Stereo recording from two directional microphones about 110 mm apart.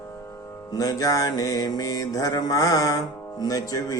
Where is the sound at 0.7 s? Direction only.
30° left (ahead or behind).